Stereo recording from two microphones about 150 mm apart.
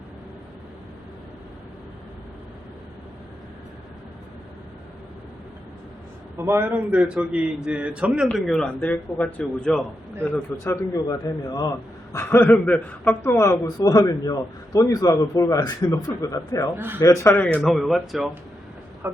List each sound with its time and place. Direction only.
6.3 s a man's voice: 15° right (ahead or behind); by 9.8 s centre (ahead or behind)
10.6 s a man's voice: 20° left (ahead or behind)
12.1 s a man's voice: 15° left (ahead or behind)
16.7 s a man's voice: 15° right (ahead or behind)
17.0 s speech: 20° left (ahead or behind); by 18.3 s centre (ahead or behind)
19.0 s speech: 15° right (ahead or behind)